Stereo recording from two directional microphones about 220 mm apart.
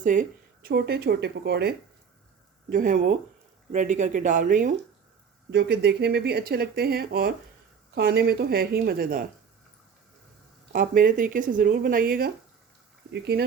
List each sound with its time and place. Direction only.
0.0 s speech: 35° right (ahead or behind)
5.5 s speech: 50° right (ahead or behind)
10.7 s speech: 40° right (ahead or behind)